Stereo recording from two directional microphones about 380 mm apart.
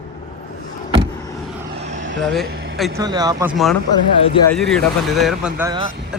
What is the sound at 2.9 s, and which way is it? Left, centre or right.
Speech, centre.